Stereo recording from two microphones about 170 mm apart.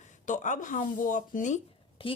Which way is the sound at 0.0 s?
45° left (ahead or behind).